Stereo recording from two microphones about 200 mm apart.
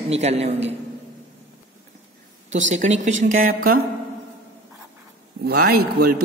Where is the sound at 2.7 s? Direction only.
35° right (ahead or behind).